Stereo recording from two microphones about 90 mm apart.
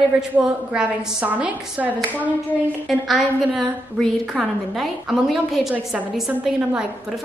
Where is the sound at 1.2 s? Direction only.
20° right (ahead or behind).